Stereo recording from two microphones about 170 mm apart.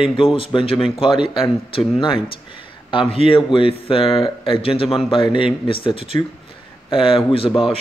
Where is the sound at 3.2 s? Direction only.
30° left (ahead or behind).